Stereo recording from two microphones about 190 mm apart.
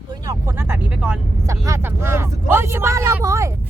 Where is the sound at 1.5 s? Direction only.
15° right (ahead or behind).